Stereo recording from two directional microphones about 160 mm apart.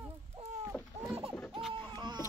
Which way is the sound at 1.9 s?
25° right (ahead or behind).